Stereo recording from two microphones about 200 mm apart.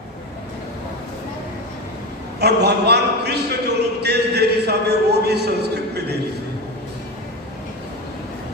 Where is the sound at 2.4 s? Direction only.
55° right (ahead or behind).